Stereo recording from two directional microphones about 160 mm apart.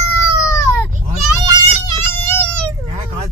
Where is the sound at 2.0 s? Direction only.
15° left (ahead or behind).